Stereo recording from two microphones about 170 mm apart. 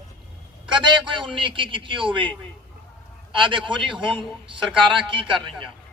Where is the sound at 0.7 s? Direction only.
30° right (ahead or behind).